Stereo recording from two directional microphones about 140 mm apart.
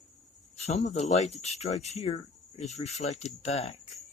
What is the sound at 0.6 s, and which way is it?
Speech, 55° left (ahead or behind).